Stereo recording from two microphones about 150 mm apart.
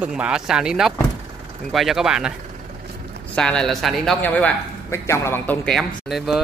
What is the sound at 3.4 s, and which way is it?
A man's voice, 5° left (ahead or behind).